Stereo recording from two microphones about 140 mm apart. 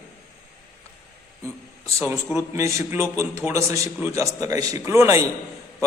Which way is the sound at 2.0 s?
20° right (ahead or behind).